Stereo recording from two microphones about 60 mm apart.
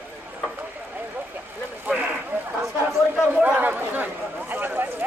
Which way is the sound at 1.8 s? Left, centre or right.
Right.